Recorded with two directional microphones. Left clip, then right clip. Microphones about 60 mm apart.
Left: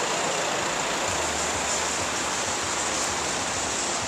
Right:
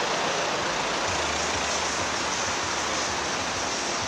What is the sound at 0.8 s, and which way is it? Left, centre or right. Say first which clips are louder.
Vehicle: even; centre.